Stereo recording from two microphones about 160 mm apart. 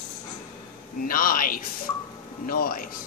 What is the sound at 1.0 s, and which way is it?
A woman's voice, 60° left (ahead or behind).